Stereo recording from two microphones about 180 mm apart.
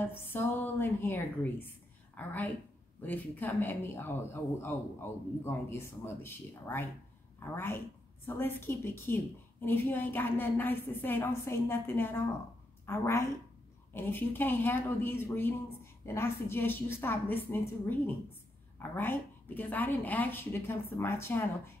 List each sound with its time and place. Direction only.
0.0 s speech: 10° left (ahead or behind)